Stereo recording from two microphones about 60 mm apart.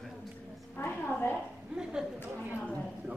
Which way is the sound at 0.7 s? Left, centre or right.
Left.